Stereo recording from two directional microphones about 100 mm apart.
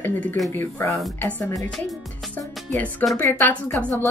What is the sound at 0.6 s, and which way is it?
Speech, 20° left (ahead or behind).